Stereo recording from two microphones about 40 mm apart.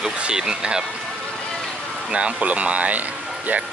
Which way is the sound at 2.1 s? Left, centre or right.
Right.